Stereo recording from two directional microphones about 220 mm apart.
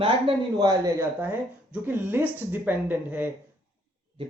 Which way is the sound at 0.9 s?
10° right (ahead or behind).